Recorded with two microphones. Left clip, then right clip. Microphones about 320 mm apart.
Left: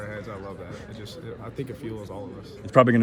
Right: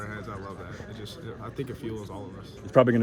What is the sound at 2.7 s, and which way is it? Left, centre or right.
Speech, left.